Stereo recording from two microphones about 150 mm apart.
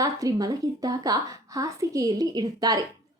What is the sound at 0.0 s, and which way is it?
A woman's voice, 25° right (ahead or behind).